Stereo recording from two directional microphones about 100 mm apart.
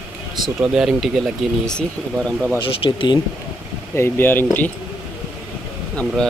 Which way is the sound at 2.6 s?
60° left (ahead or behind).